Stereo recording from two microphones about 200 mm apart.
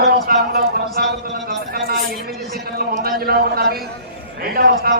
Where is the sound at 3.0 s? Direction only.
50° right (ahead or behind).